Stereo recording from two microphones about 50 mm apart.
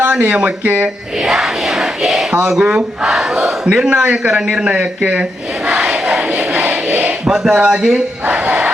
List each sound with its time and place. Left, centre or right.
0.6 s speech: right
1.2 s crowd: centre
2.5 s speech: centre
5.6 s a sound: right
7.3 s speech: centre
8.3 s music: right